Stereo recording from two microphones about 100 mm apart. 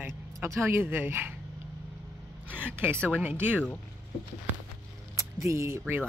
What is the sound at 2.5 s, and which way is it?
Speech, 20° right (ahead or behind).